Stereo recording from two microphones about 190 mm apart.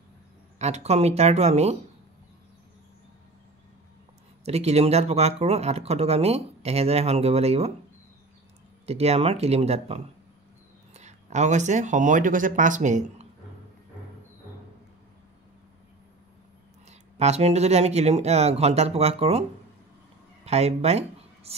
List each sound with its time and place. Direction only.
0.6 s speech: 35° right (ahead or behind)
4.5 s speech: 35° right (ahead or behind)
8.8 s speech: 35° right (ahead or behind)
17.2 s speech: 35° right (ahead or behind)
20.4 s speech: 35° right (ahead or behind)